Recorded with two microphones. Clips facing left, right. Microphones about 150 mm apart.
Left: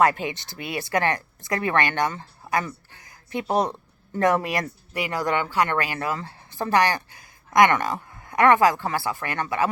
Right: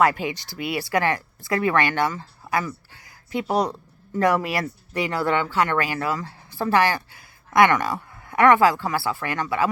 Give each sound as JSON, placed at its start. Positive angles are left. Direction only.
{"t": 0.0, "sound": "speech", "side_deg": 20}